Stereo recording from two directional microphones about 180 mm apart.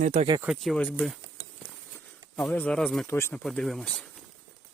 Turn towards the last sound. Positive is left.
turn(degrees=5)  # may be behind; listen again after turning